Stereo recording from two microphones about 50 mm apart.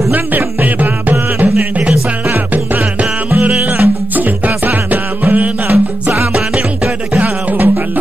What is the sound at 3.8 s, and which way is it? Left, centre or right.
Music, right.